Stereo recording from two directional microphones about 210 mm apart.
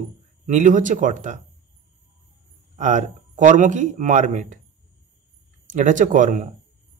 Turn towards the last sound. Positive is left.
turn(degrees=-35)  # may be behind; listen again after turning